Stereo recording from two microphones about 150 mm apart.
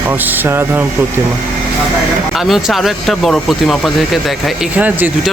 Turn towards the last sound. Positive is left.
turn(degrees=-10)  # may be behind; listen again after turning